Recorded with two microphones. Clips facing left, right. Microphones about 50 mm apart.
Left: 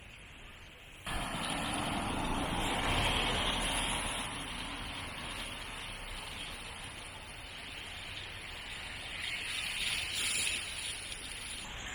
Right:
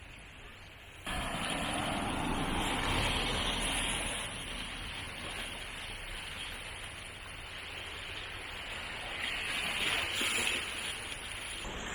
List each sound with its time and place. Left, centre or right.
1.0 s vehicle: centre
2.8 s vehicle: left
3.4 s vehicle: centre
3.8 s vehicle: centre
9.0 s a sound: centre